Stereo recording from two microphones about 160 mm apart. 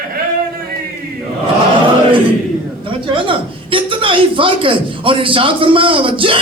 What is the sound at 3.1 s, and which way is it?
Speech, 35° right (ahead or behind).